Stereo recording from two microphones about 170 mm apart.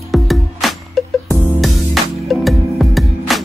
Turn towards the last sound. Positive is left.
turn(degrees=0)  # may be behind; listen again after turning